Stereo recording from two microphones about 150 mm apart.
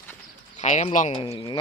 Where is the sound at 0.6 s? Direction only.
45° left (ahead or behind).